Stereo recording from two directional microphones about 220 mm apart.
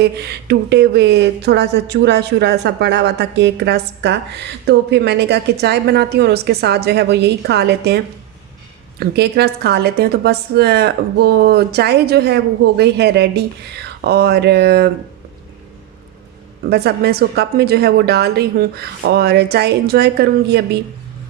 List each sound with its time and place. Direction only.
0.0 s speech: 50° right (ahead or behind)
16.6 s speech: 45° right (ahead or behind)